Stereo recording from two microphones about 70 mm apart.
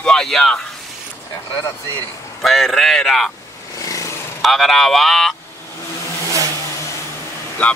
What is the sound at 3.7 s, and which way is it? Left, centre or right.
Vehicle, left.